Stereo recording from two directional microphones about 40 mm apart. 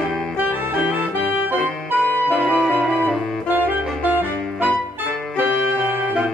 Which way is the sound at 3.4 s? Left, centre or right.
Right.